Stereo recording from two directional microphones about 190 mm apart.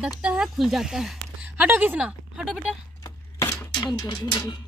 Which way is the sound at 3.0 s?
15° left (ahead or behind).